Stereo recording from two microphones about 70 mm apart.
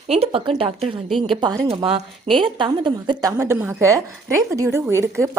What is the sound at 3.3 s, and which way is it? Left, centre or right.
Speech, right.